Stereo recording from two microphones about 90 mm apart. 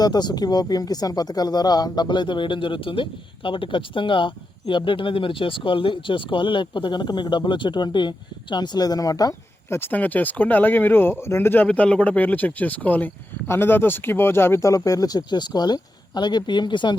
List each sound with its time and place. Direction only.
0.0 s speech: 50° left (ahead or behind)
9.6 s speech: 25° left (ahead or behind)
14.7 s speech: 40° left (ahead or behind); by 17.0 s 60° left (ahead or behind)